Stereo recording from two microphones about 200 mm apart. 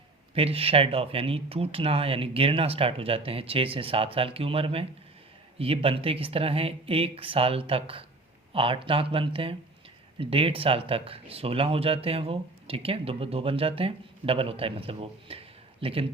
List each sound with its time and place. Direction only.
0.3 s speech: 30° right (ahead or behind)